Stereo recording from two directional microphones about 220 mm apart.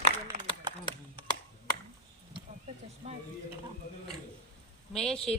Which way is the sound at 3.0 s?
30° right (ahead or behind).